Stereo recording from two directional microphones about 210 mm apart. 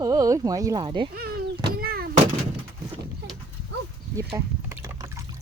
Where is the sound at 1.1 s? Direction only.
45° right (ahead or behind).